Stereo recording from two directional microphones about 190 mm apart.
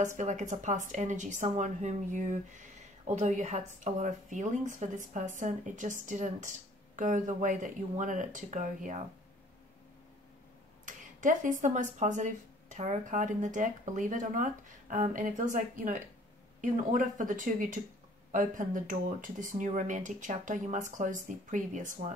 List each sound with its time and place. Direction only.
0.2 s speech: 40° right (ahead or behind)
10.9 s a sound: 45° right (ahead or behind)
11.6 s speech: 40° right (ahead or behind)